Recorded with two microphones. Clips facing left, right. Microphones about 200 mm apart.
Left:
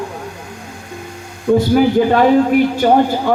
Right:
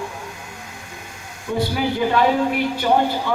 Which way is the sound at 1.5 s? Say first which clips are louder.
Left 10 dB; 50° left (ahead or behind).